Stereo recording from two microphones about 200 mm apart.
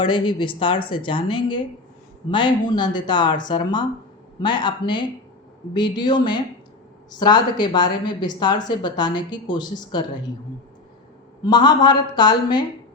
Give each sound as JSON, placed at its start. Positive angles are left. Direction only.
{"t": 0.0, "sound": "a woman's voice", "side_deg": 25}
{"t": 11.4, "sound": "a woman's voice", "side_deg": 20}